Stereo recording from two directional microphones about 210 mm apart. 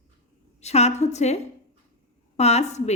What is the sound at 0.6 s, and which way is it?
A woman's voice, 30° left (ahead or behind).